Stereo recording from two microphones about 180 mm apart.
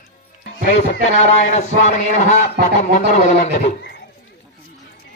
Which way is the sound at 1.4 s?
40° left (ahead or behind).